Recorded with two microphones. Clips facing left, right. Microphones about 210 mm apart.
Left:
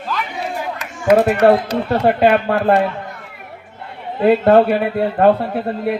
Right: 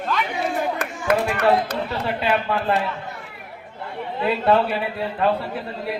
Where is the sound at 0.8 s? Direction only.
55° right (ahead or behind).